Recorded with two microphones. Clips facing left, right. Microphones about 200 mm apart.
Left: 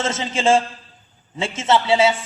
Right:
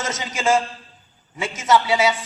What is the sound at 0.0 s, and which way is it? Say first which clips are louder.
A man's voice: left 3 dB; 30° left (ahead or behind).